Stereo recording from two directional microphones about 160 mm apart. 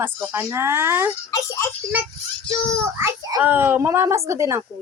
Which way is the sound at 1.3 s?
20° left (ahead or behind).